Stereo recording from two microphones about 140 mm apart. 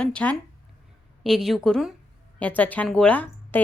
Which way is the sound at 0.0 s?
10° left (ahead or behind).